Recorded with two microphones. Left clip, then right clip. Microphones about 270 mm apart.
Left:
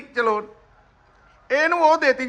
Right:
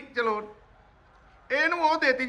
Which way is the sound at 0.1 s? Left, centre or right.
Centre.